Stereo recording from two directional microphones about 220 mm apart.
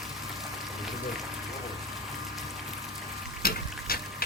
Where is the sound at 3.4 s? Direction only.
45° left (ahead or behind).